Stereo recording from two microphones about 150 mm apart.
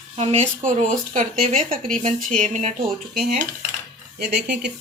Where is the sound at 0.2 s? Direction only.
45° right (ahead or behind).